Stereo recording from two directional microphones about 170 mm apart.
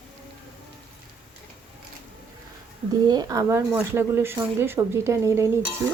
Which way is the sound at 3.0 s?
20° right (ahead or behind).